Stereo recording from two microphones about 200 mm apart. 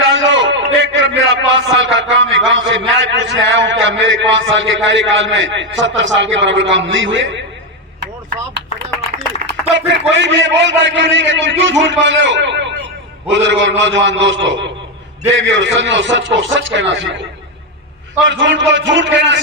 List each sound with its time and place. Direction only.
0.0 s a sound: 70° right (ahead or behind)
1.8 s a man's voice: 70° right (ahead or behind)
9.7 s a man's voice: 65° right (ahead or behind)
18.2 s a man's voice: 65° right (ahead or behind)